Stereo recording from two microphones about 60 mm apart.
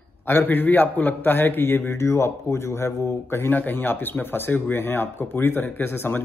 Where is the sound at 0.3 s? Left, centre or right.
Left.